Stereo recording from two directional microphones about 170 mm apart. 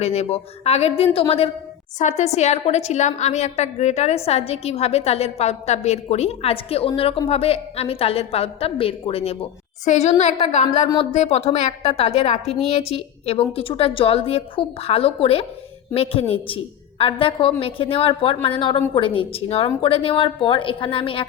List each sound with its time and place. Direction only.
0.0 s a woman's voice: 40° left (ahead or behind)